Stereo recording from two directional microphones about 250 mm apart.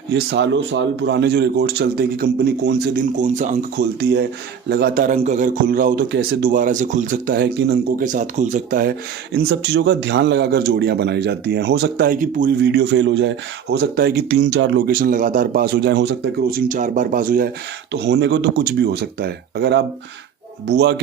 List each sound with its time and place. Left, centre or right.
0.1 s a man's voice: right
9.3 s a man's voice: right